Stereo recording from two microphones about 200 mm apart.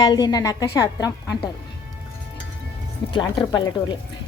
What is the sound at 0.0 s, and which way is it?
A woman's voice, 20° left (ahead or behind).